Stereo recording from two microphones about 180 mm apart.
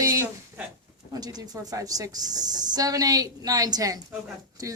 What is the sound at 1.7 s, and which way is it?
A woman's voice, 20° right (ahead or behind).